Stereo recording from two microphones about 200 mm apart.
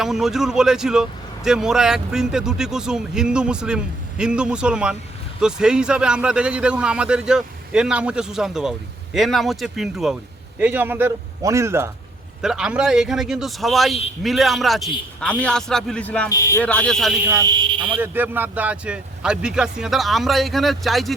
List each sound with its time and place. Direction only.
0.0 s a man's voice: centre (ahead or behind)
17.2 s speech: 15° right (ahead or behind)
18.0 s speech: 10° right (ahead or behind)